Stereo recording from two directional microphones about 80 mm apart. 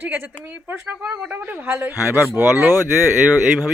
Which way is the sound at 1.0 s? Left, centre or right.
Centre.